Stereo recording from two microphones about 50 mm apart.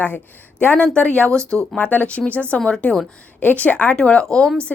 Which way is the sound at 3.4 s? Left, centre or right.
Left.